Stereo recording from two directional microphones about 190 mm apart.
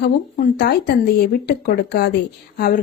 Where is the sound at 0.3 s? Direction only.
55° left (ahead or behind).